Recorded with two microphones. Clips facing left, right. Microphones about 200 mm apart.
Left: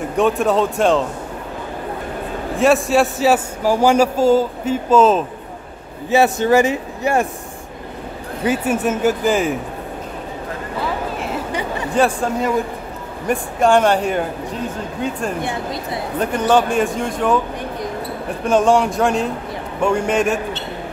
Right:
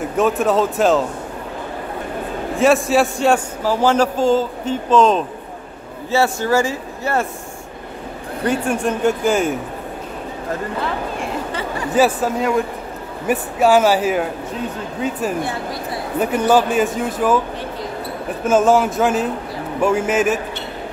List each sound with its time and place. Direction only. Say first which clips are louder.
0.1 s speech: left 1 dB; centre (ahead or behind)
2.5 s a man's voice: even; centre (ahead or behind)
6.0 s a man's voice: left 3 dB; 20° left (ahead or behind)
8.5 s speech: left 1 dB; 5° left (ahead or behind)
11.9 s speech: right 1 dB; 5° right (ahead or behind)
15.4 s speech: left 1 dB; 20° left (ahead or behind)
16.2 s speech: right 1 dB; 10° right (ahead or behind)
18.4 s speech: even; 5° right (ahead or behind)